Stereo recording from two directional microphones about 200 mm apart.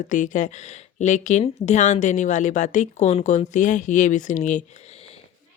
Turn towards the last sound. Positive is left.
turn(degrees=30)  # may be behind; listen again after turning